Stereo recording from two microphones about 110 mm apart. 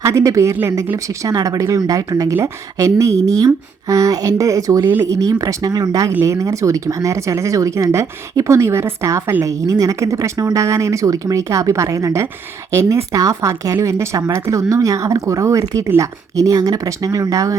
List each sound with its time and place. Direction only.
0.0 s speech: 25° right (ahead or behind)
6.1 s speech: 25° right (ahead or behind)